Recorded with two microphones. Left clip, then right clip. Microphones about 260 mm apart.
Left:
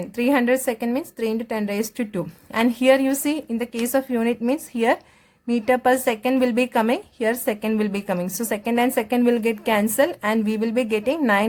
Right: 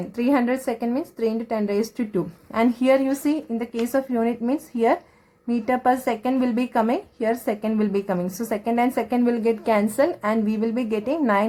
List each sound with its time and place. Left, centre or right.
0.2 s speech: left